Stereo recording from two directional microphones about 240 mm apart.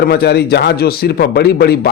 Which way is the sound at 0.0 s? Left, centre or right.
Left.